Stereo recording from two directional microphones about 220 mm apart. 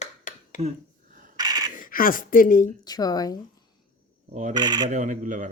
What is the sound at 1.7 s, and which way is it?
Speech, 40° left (ahead or behind).